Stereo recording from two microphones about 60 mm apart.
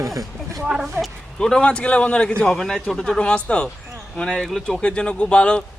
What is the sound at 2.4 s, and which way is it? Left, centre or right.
Speech, centre.